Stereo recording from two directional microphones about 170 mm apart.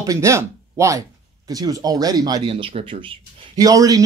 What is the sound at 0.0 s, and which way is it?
Speech, 20° right (ahead or behind).